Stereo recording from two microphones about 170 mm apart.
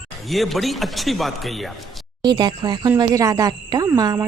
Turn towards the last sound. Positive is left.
turn(degrees=-20)  # may be behind; listen again after turning